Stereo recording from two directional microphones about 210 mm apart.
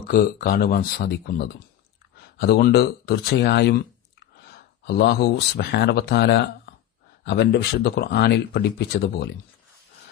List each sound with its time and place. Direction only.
0.0 s speech: 45° left (ahead or behind)